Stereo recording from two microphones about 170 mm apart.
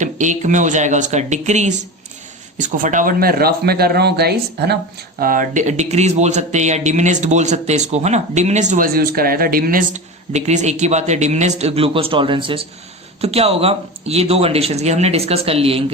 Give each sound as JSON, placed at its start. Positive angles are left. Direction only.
{"t": 0.0, "sound": "a man's voice", "side_deg": -45}
{"t": 5.2, "sound": "a man's voice", "side_deg": -55}
{"t": 9.9, "sound": "a man's voice", "side_deg": -40}